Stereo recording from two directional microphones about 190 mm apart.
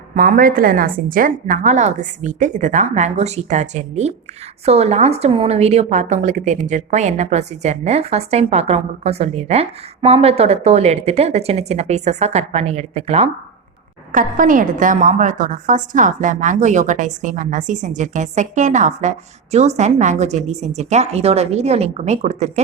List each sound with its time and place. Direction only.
0.1 s a woman's voice: 45° right (ahead or behind)
14.1 s a woman's voice: 45° right (ahead or behind)